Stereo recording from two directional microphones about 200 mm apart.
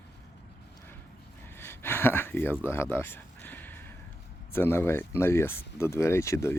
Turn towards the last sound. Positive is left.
turn(degrees=15)  # may be behind; listen again after turning